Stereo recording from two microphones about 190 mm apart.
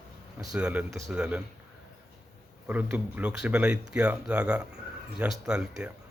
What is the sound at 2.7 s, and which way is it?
Speech, 10° right (ahead or behind).